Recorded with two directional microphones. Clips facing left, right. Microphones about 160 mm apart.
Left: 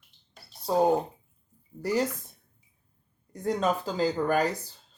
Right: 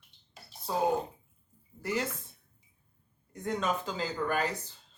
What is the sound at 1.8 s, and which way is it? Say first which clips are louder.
Speech: left 6 dB; 40° left (ahead or behind).